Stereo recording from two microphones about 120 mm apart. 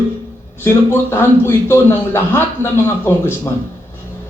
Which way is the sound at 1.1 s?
20° left (ahead or behind).